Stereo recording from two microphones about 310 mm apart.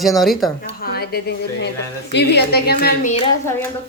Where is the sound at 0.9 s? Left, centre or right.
Left.